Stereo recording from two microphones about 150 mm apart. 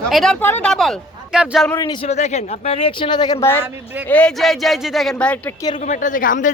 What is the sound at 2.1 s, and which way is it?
Speech, 50° left (ahead or behind).